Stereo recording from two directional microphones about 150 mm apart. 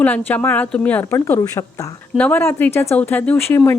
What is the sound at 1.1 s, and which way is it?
Speech, 20° left (ahead or behind).